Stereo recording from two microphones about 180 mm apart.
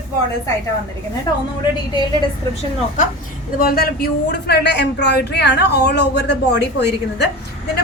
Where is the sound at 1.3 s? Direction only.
20° left (ahead or behind).